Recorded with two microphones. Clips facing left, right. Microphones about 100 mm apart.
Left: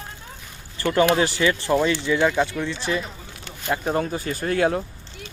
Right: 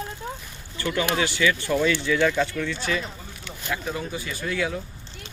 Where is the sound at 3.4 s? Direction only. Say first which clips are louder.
Left 5 dB; 40° left (ahead or behind).